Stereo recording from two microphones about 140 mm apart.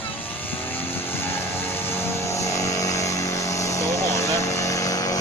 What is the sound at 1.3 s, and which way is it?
Vehicle, 15° left (ahead or behind).